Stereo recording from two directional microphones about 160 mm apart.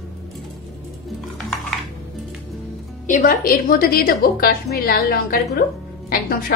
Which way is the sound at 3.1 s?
60° left (ahead or behind).